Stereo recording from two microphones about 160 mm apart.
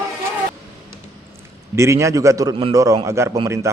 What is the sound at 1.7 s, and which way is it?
A man's voice, 20° right (ahead or behind).